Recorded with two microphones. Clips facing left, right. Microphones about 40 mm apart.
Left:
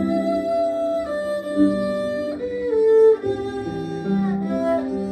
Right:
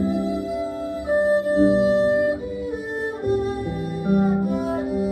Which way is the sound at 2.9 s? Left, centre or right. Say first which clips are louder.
Left 11 dB; left.